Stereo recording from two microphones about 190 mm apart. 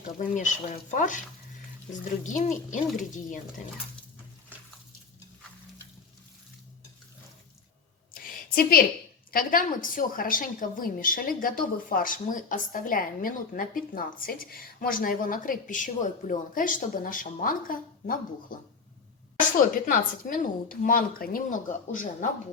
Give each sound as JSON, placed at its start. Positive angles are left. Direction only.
{"t": 0.1, "sound": "a woman's voice", "side_deg": 45}
{"t": 8.1, "sound": "a sound", "side_deg": 50}
{"t": 9.3, "sound": "a woman's voice", "side_deg": 45}
{"t": 19.5, "sound": "a woman's voice", "side_deg": 45}